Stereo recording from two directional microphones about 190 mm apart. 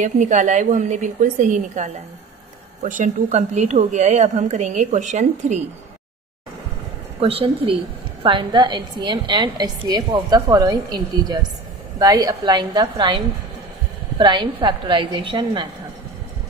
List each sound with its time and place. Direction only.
0.0 s a woman's voice: 40° right (ahead or behind)
7.2 s a woman's voice: 30° right (ahead or behind)